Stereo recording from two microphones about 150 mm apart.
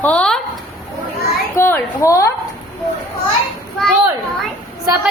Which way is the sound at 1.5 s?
15° left (ahead or behind).